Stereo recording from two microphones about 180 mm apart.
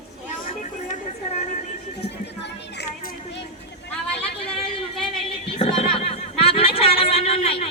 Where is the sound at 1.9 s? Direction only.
70° left (ahead or behind).